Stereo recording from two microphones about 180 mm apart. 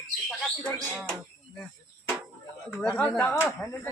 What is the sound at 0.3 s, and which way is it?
Speech, 10° left (ahead or behind).